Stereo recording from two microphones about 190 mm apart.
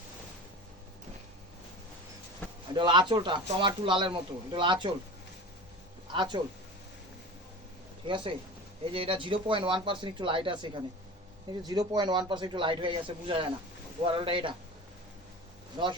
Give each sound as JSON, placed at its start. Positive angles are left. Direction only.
{"t": 2.7, "sound": "a man's voice", "side_deg": -25}
{"t": 6.1, "sound": "a man's voice", "side_deg": -25}
{"t": 8.0, "sound": "a man's voice", "side_deg": -25}
{"t": 15.8, "sound": "a man's voice", "side_deg": -25}